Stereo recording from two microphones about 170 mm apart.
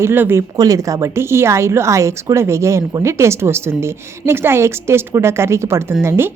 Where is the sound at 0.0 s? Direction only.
15° right (ahead or behind).